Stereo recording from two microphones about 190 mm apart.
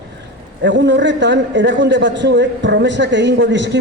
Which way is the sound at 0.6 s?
70° right (ahead or behind).